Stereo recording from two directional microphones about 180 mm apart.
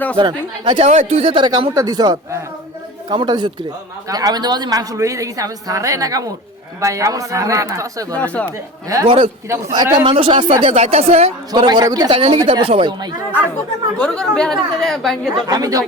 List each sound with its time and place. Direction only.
0.2 s a woman's voice: 30° right (ahead or behind)
8.1 s speech: 5° left (ahead or behind)
8.4 s speech: 15° right (ahead or behind)
9.0 s a woman's voice: 30° right (ahead or behind)
9.5 s speech: 15° right (ahead or behind)
10.0 s a woman's voice: 30° right (ahead or behind)
11.5 s a woman's voice: 25° right (ahead or behind)
14.0 s a woman's voice: 5° left (ahead or behind)
15.4 s a woman's voice: 20° right (ahead or behind)